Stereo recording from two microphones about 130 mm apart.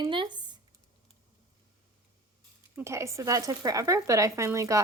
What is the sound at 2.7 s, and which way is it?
A woman's voice, 20° right (ahead or behind).